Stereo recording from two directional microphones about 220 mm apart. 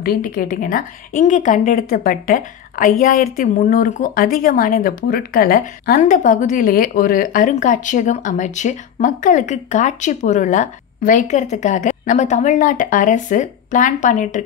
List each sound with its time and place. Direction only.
0.0 s speech: 40° left (ahead or behind)